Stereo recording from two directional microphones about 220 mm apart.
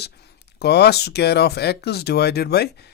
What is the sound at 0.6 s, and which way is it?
Speech, 45° left (ahead or behind).